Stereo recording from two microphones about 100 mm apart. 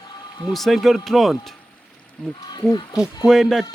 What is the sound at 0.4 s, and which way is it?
Speech, centre (ahead or behind).